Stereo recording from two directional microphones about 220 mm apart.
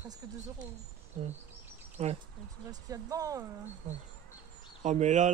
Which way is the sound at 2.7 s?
15° right (ahead or behind).